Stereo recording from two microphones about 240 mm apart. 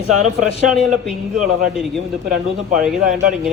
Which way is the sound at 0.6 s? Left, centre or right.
Centre.